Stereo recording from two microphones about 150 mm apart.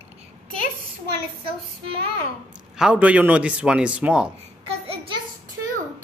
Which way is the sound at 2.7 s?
5° right (ahead or behind).